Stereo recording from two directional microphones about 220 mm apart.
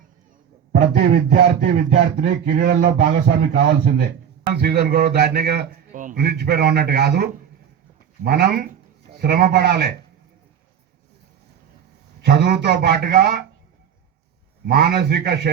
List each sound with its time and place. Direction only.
0.7 s a man's voice: 45° right (ahead or behind)
12.2 s a man's voice: 50° right (ahead or behind)
14.7 s a man's voice: 45° right (ahead or behind)